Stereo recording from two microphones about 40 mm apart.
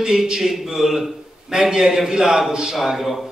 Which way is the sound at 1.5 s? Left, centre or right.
Centre.